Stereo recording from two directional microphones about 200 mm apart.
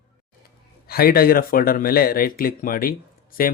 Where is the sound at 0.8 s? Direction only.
50° left (ahead or behind).